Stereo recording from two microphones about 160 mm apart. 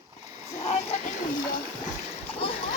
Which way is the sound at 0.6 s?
40° left (ahead or behind).